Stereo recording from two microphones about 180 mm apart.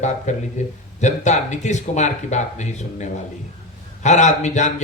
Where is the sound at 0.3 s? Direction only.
40° left (ahead or behind).